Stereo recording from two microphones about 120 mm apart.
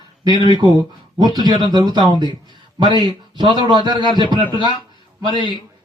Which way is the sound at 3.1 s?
40° right (ahead or behind).